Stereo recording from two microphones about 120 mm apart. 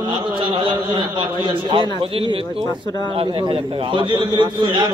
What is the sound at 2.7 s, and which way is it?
Speech, 30° left (ahead or behind).